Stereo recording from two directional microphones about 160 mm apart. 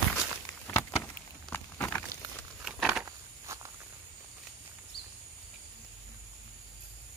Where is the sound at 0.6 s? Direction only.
15° left (ahead or behind).